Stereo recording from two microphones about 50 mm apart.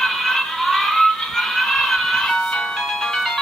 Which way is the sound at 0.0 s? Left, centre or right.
Centre.